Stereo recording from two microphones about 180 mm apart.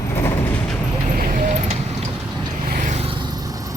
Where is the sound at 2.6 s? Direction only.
50° right (ahead or behind); by 3.7 s 20° right (ahead or behind).